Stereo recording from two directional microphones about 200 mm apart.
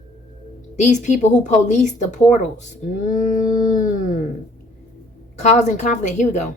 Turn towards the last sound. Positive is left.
turn(degrees=35)  # may be behind; listen again after turning